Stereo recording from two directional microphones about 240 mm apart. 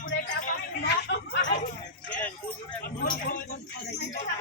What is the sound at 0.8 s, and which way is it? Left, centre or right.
Chatter, left.